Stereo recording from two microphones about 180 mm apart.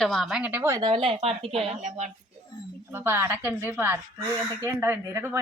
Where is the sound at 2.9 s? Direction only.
15° right (ahead or behind).